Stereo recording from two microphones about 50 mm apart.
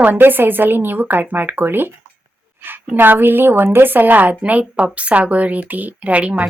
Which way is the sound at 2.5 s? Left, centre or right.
Right.